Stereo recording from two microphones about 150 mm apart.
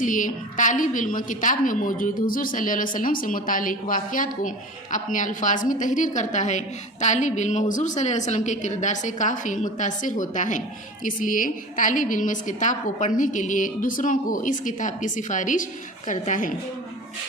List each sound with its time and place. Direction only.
0.0 s a woman's voice: 60° left (ahead or behind)